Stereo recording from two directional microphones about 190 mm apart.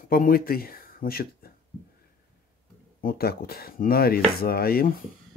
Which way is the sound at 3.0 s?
50° left (ahead or behind).